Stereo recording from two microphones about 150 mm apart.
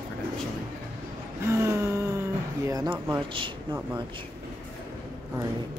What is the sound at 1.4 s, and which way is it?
Vehicle, 20° right (ahead or behind).